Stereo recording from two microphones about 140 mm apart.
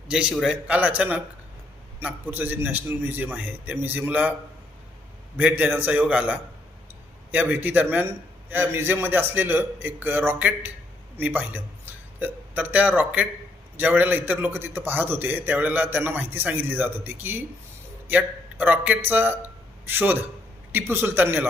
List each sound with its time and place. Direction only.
0.1 s a man's voice: 5° right (ahead or behind)
5.4 s a man's voice: 10° right (ahead or behind)